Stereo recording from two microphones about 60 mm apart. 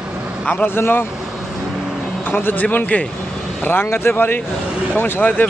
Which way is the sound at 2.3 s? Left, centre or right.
Left.